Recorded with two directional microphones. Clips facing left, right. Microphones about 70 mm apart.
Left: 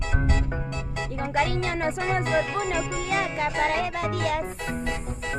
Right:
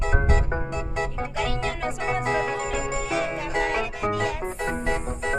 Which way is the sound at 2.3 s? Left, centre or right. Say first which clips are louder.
Even; right.